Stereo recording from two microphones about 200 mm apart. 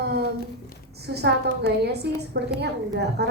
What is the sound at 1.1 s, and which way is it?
A woman's voice, 55° right (ahead or behind).